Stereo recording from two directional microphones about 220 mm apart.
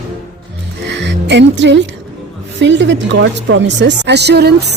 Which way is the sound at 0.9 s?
55° right (ahead or behind).